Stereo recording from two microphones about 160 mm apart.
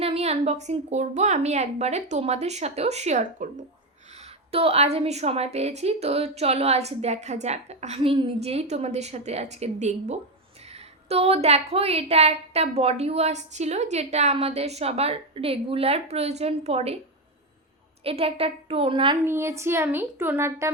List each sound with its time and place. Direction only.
0.0 s a woman's voice: 40° right (ahead or behind)
18.0 s a woman's voice: 35° right (ahead or behind)
19.2 s a child's voice: 15° right (ahead or behind)